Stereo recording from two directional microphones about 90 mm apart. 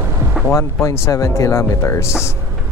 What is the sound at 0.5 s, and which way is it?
Speech, 35° left (ahead or behind).